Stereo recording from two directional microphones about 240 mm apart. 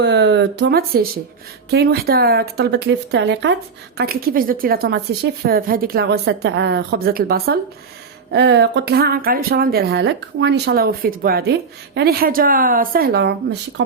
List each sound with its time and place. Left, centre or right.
0.0 s speech: right